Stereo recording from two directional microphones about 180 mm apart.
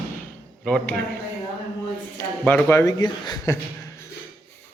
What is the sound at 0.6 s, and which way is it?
Speech, centre (ahead or behind).